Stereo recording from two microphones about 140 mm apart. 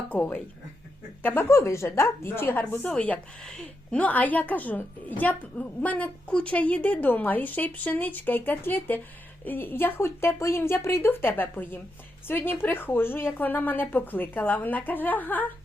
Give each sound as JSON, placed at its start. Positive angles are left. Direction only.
{"t": 0.1, "sound": "a woman's voice", "side_deg": 10}